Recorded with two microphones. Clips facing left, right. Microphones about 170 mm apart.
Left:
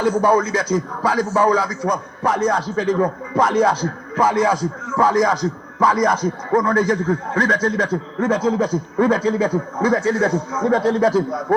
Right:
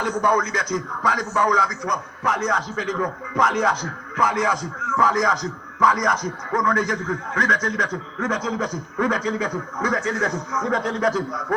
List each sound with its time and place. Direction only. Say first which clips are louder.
0.2 s a man's voice: left 5 dB; 30° left (ahead or behind)